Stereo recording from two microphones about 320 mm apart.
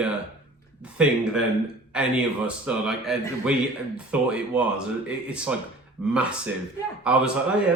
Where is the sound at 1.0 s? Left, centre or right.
Centre.